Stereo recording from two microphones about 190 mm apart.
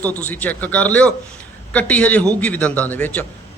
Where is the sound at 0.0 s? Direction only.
10° left (ahead or behind).